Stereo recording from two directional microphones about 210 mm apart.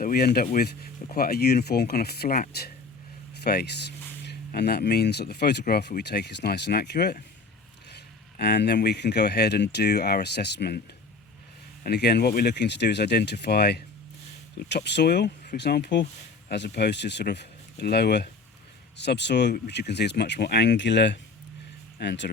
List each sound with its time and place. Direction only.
0.0 s speech: 45° left (ahead or behind)
11.8 s speech: 50° left (ahead or behind)